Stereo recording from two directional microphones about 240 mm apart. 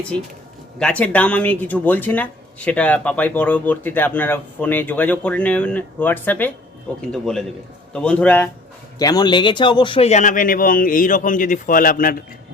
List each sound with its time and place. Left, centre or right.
0.8 s a man's voice: centre; by 12.2 s left